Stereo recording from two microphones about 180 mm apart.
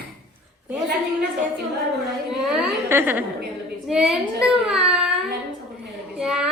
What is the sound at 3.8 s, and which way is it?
Child singing, 5° right (ahead or behind).